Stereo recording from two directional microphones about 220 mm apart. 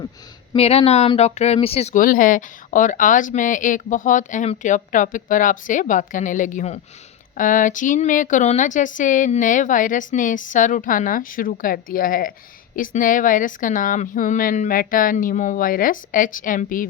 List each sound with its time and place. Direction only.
0.5 s speech: 25° left (ahead or behind)